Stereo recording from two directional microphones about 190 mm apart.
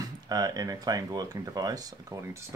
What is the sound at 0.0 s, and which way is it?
Speech, 20° right (ahead or behind).